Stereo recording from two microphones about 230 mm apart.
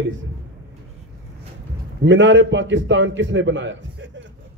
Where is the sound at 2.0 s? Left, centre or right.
Right.